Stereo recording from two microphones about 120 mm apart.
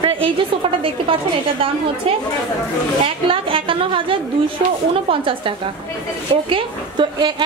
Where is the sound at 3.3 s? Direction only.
45° right (ahead or behind).